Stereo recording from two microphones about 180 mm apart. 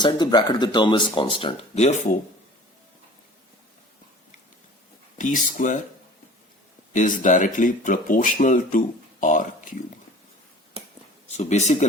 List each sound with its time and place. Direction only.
0.0 s speech: 25° left (ahead or behind)
5.1 s speech: 45° left (ahead or behind)
6.9 s speech: 45° left (ahead or behind)
11.3 s speech: 40° left (ahead or behind)